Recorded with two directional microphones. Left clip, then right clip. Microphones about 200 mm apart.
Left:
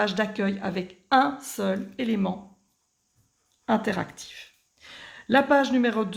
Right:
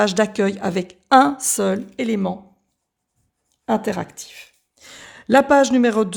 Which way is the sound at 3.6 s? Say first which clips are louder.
Right 4 dB; 35° right (ahead or behind).